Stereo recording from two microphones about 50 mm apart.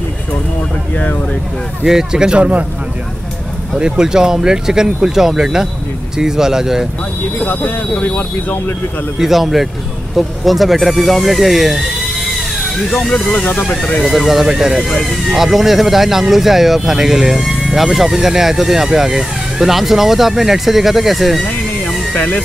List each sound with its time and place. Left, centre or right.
1.9 s speech: centre
3.7 s speech: centre
7.3 s speech: left
9.2 s speech: centre
14.0 s speech: centre
21.5 s music: left